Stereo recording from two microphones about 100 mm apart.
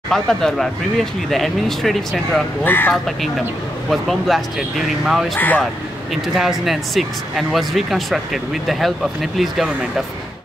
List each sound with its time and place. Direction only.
0.1 s speech: 5° left (ahead or behind)
2.6 s speech: 20° left (ahead or behind)
2.9 s speech: centre (ahead or behind)